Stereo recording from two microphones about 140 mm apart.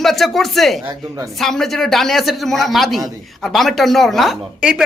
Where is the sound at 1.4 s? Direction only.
Centre (ahead or behind).